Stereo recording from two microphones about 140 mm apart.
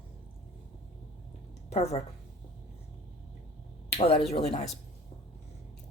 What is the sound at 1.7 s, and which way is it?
Speech, 50° left (ahead or behind).